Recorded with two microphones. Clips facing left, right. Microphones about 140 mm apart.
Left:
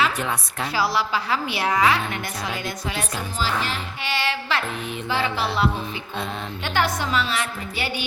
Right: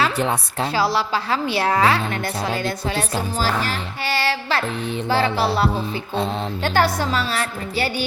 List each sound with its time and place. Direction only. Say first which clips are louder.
0.0 s a woman's voice: right 3 dB; 30° right (ahead or behind)